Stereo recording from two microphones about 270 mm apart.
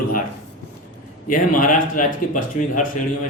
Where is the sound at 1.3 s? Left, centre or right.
Left.